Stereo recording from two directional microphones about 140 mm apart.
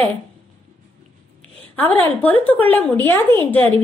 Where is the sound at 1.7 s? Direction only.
10° left (ahead or behind).